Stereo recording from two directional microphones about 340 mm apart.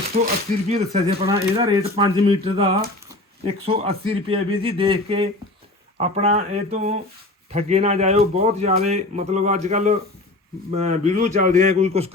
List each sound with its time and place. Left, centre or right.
0.1 s speech: right